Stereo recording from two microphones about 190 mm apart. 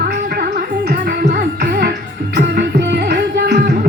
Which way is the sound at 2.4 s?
60° right (ahead or behind).